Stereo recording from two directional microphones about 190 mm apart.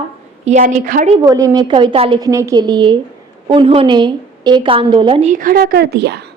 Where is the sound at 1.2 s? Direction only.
20° right (ahead or behind).